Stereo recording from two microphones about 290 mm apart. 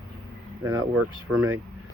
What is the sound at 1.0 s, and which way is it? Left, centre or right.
Speech, right.